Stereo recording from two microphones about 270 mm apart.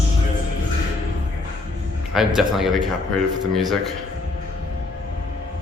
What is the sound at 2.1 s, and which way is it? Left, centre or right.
A man's voice, centre.